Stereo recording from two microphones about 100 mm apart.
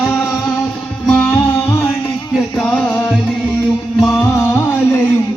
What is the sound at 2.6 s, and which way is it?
Music, 15° left (ahead or behind).